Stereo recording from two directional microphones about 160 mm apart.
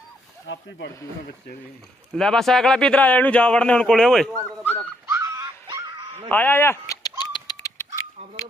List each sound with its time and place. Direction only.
2.1 s speech: 5° left (ahead or behind)
5.0 s dog: 20° right (ahead or behind)
6.3 s a sound: 10° left (ahead or behind)